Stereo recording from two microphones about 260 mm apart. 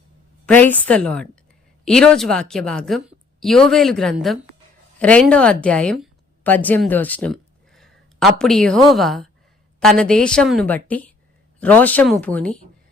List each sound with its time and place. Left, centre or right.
0.4 s a woman's voice: centre